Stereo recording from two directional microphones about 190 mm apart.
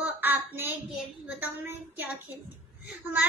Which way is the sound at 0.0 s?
10° right (ahead or behind).